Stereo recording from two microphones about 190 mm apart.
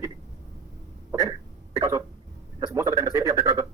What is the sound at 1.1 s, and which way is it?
Cough, 15° right (ahead or behind).